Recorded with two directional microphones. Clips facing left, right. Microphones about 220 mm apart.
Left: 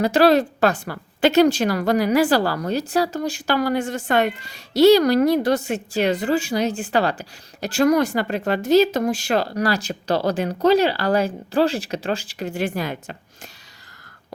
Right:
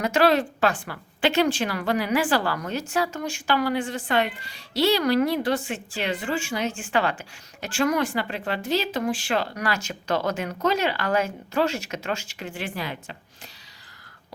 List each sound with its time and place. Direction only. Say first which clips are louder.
0.0 s a woman's voice: left 5 dB; 35° left (ahead or behind)